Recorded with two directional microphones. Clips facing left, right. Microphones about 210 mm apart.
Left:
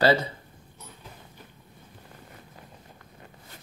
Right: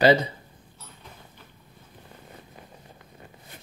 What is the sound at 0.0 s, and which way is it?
Speech, 15° right (ahead or behind).